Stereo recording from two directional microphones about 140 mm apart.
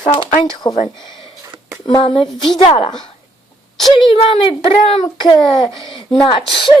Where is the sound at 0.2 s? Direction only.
30° left (ahead or behind).